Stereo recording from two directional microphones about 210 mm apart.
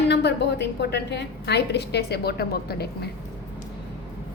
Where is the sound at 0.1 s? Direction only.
55° left (ahead or behind).